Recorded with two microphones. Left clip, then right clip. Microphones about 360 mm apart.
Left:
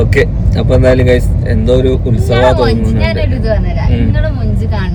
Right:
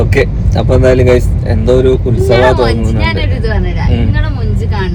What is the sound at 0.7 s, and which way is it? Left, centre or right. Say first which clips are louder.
Speech: right 1 dB; right.